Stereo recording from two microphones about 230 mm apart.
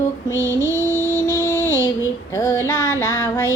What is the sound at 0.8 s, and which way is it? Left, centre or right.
Music, centre.